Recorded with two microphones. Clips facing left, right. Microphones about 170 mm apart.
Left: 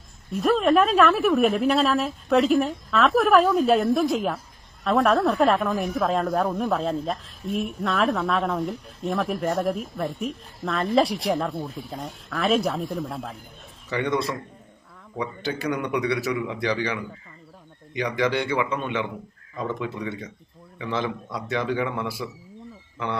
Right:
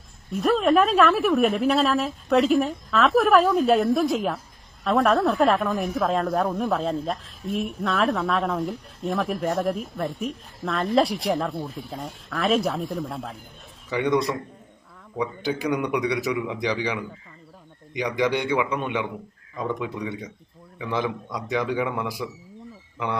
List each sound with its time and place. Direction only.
0.3 s speech: centre (ahead or behind)
13.9 s a man's voice: 15° right (ahead or behind)